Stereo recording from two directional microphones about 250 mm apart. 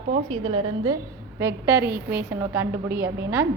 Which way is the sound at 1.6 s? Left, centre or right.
Centre.